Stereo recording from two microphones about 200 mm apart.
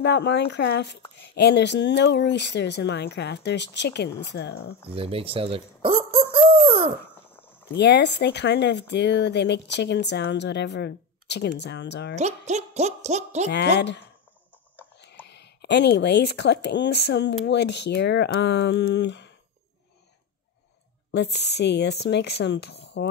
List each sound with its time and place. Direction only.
0.0 s speech: 55° left (ahead or behind)
4.8 s speech: 30° right (ahead or behind)
6.3 s a sound: 30° right (ahead or behind)
7.3 s a sound: 10° left (ahead or behind)
7.7 s speech: 60° left (ahead or behind)
12.2 s speech: 35° right (ahead or behind)
13.5 s speech: 60° left (ahead or behind)
15.2 s speech: 60° left (ahead or behind)
21.1 s speech: 55° left (ahead or behind)